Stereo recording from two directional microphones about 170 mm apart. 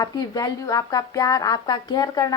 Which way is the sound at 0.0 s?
25° left (ahead or behind).